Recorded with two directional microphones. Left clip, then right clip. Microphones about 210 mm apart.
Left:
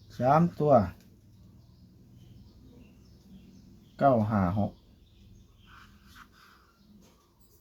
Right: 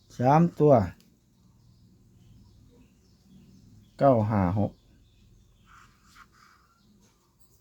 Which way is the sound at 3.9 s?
55° right (ahead or behind).